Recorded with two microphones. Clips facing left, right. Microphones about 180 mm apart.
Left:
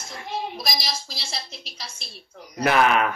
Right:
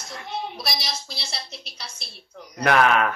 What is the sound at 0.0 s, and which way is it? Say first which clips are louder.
Speech: left 1 dB; 10° left (ahead or behind).